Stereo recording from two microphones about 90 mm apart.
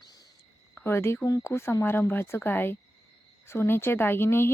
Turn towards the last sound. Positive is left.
turn(degrees=25)  # may be behind; listen again after turning